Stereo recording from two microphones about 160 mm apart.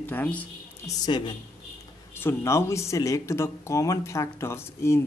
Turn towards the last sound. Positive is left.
turn(degrees=15)  # may be behind; listen again after turning